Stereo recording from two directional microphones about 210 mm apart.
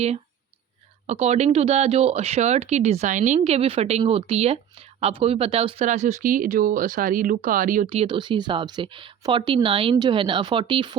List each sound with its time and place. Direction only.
1.0 s speech: 30° right (ahead or behind)
7.9 s speech: 25° right (ahead or behind)